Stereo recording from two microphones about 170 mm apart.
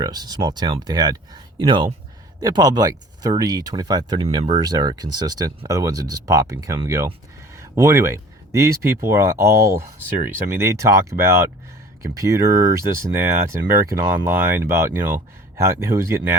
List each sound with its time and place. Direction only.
0.0 s speech: 25° right (ahead or behind)